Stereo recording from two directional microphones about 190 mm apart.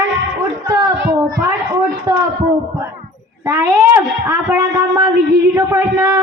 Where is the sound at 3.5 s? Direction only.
10° right (ahead or behind).